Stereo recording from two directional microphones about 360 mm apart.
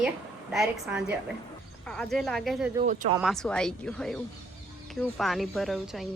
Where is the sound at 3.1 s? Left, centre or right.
Centre.